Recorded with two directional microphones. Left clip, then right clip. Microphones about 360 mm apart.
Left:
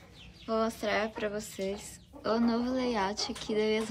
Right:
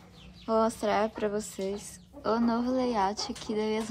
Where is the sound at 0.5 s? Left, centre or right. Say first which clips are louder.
Right 4 dB; centre.